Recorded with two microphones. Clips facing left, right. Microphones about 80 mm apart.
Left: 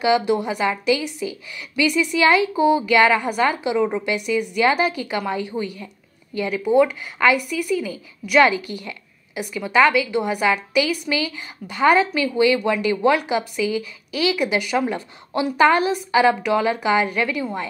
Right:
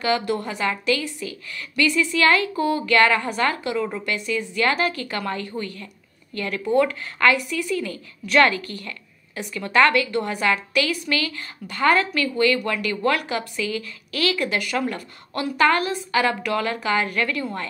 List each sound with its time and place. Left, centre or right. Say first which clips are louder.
0.0 s a woman's voice: left 4 dB; centre